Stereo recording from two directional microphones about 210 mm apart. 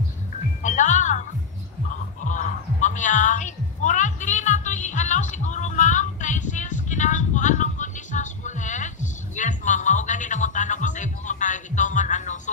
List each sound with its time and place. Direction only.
0.6 s music: 35° left (ahead or behind)
2.2 s music: 35° left (ahead or behind)